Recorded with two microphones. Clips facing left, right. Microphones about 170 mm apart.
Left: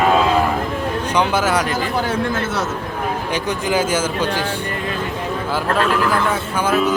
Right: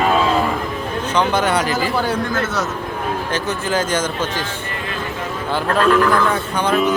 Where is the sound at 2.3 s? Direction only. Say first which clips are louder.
Even; 30° left (ahead or behind).